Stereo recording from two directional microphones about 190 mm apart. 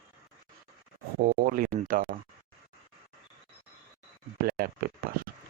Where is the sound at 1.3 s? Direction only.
50° right (ahead or behind).